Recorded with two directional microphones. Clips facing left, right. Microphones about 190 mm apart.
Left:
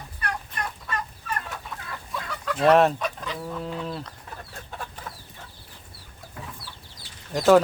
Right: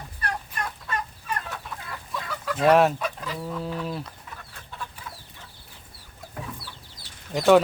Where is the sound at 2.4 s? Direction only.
5° right (ahead or behind).